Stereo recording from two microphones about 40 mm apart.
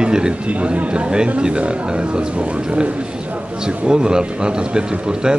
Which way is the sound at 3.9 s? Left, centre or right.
Centre.